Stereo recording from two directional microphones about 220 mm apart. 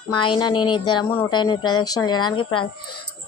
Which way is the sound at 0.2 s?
20° left (ahead or behind).